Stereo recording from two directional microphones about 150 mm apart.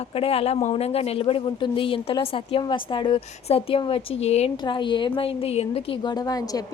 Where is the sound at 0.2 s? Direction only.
40° left (ahead or behind).